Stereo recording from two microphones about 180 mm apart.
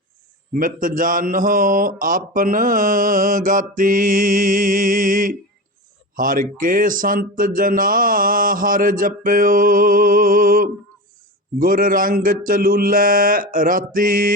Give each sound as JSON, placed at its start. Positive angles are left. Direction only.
{"t": 0.5, "sound": "a man's voice", "side_deg": -50}